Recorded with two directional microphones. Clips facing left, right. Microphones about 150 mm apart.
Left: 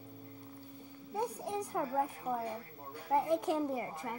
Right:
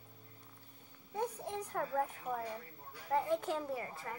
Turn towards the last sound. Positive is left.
turn(degrees=20)  # may be behind; listen again after turning